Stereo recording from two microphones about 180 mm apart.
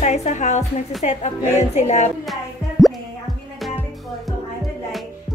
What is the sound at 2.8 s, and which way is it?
Music, centre (ahead or behind).